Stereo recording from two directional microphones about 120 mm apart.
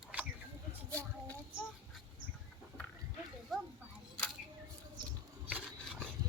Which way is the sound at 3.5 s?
Centre (ahead or behind).